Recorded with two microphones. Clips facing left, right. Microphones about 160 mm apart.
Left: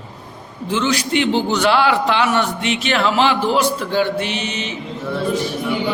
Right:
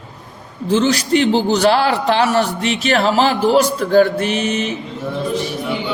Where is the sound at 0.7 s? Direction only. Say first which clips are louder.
Right 4 dB; 40° right (ahead or behind).